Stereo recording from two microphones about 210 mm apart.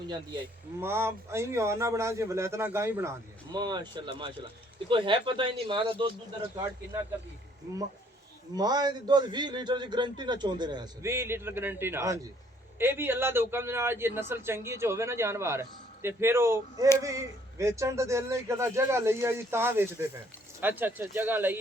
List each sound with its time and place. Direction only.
0.1 s a man's voice: 15° right (ahead or behind)
8.5 s a man's voice: 20° right (ahead or behind)